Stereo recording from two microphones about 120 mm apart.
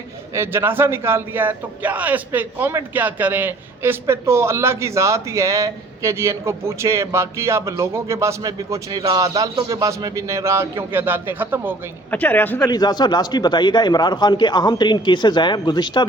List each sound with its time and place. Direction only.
0.3 s a man's voice: 20° right (ahead or behind)
12.1 s speech: 15° left (ahead or behind)
12.6 s a man's voice: 35° left (ahead or behind)